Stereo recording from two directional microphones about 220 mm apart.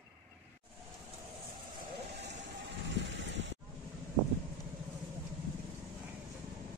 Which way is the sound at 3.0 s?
55° right (ahead or behind).